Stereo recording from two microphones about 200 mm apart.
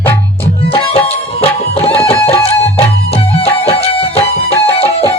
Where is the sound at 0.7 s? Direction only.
30° left (ahead or behind).